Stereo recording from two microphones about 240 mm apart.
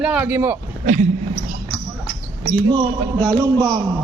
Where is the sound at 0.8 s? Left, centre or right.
Right.